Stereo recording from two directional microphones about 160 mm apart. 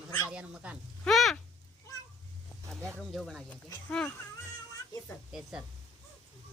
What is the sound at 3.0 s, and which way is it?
Speech, centre (ahead or behind).